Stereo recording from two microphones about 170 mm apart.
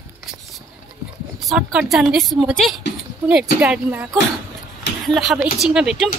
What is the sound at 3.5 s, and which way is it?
Speech, 10° right (ahead or behind).